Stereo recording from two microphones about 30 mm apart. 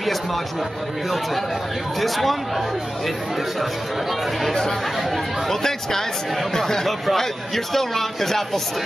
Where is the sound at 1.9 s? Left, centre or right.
Centre.